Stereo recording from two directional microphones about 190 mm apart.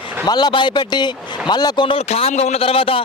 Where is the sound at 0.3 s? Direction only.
20° left (ahead or behind).